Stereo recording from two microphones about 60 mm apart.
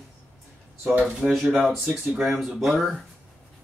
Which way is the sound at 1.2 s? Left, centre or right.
Centre.